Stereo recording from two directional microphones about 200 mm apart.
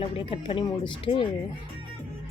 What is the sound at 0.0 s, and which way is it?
Speech, 25° left (ahead or behind).